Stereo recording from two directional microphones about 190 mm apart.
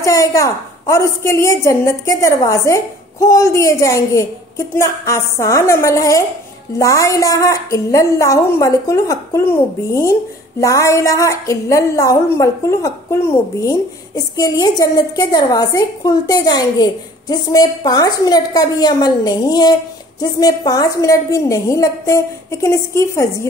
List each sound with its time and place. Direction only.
0.0 s a woman's voice: 15° left (ahead or behind)